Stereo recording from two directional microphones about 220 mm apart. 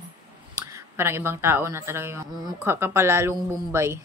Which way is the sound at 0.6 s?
15° right (ahead or behind).